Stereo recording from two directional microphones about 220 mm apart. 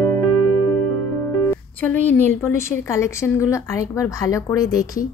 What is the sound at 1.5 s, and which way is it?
A woman's voice, 5° left (ahead or behind).